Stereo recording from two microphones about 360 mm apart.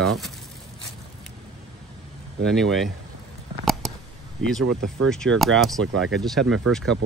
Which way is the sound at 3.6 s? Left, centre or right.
Centre.